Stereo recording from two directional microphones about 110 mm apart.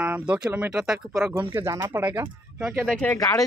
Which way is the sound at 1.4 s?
20° right (ahead or behind).